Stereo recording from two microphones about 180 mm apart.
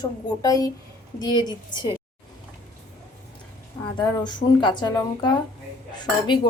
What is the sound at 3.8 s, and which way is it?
A woman's voice, 25° left (ahead or behind).